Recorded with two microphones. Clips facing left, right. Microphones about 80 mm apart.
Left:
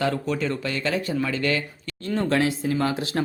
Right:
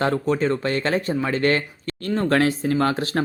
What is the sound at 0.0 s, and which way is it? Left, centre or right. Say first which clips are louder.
Speech: right 4 dB; right.